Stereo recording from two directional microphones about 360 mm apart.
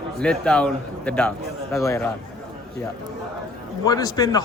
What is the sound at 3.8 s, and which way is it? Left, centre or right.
Speech, centre.